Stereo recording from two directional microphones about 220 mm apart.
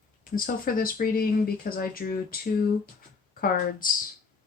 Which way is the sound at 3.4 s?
40° left (ahead or behind).